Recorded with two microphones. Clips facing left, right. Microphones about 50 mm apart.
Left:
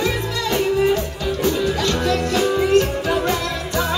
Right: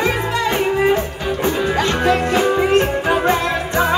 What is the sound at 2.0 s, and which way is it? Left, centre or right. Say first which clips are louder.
Music: right 5 dB; right.